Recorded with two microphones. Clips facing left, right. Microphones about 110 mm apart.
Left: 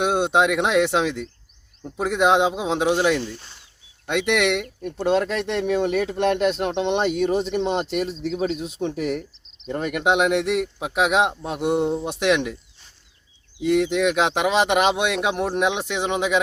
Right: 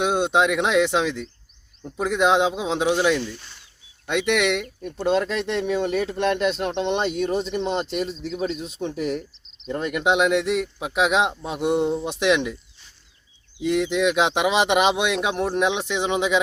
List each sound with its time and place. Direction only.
0.0 s speech: 5° left (ahead or behind)
3.2 s speech: 35° left (ahead or behind)
4.0 s speech: 5° left (ahead or behind)
13.6 s speech: 5° left (ahead or behind)